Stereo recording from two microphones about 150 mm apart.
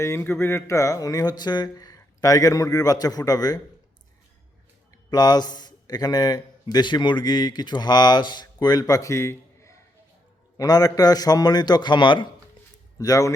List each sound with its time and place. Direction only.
0.0 s speech: 15° left (ahead or behind)
5.1 s a man's voice: 25° left (ahead or behind)